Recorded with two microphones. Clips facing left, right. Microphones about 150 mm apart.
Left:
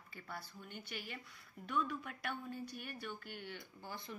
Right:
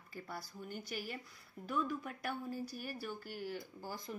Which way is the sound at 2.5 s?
40° right (ahead or behind).